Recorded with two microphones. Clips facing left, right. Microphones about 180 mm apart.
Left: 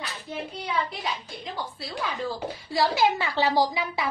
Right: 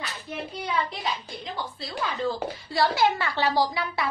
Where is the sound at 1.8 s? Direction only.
5° left (ahead or behind).